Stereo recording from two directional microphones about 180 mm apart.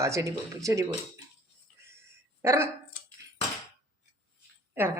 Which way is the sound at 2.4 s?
15° right (ahead or behind).